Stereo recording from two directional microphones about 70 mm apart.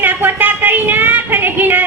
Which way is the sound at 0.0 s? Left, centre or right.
Right.